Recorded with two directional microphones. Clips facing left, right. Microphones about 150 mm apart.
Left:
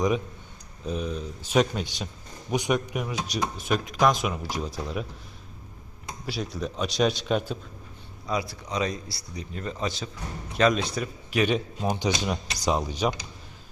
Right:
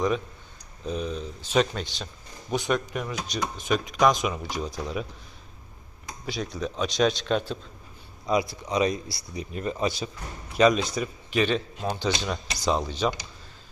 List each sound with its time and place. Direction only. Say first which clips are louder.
0.9 s speech: even; 5° left (ahead or behind)
6.2 s speech: right 1 dB; 5° left (ahead or behind)
8.3 s speech: right 4 dB; 15° right (ahead or behind); by 13.1 s 10° left (ahead or behind)